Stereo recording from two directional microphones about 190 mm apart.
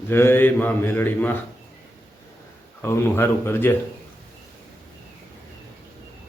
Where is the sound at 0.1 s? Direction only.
10° left (ahead or behind).